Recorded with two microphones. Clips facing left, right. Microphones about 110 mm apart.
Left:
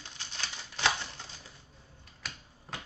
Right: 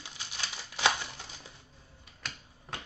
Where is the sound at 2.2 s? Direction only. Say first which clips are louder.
Right 1 dB; 5° left (ahead or behind).